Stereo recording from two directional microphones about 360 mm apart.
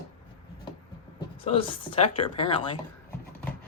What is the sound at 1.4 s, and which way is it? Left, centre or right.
Speech, centre.